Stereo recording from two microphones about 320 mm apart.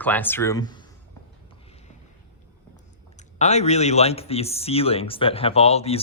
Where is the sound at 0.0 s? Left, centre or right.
Centre.